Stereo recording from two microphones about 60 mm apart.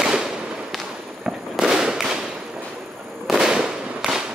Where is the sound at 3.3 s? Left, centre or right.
Centre.